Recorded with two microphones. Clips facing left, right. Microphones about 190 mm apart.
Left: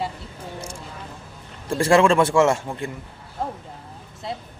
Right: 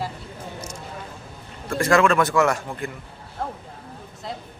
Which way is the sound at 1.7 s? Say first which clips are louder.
Left 2 dB; 30° left (ahead or behind).